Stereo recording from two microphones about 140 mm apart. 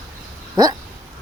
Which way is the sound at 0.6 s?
30° right (ahead or behind).